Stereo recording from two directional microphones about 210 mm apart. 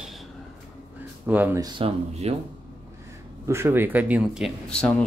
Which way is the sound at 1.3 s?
10° right (ahead or behind).